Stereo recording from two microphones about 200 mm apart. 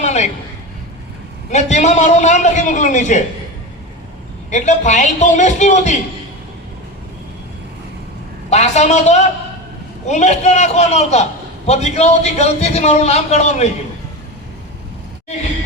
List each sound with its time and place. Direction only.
0.0 s a sound: 35° left (ahead or behind)
1.5 s a man's voice: 35° left (ahead or behind)
4.5 s a man's voice: 35° left (ahead or behind)
8.4 s a man's voice: 35° left (ahead or behind)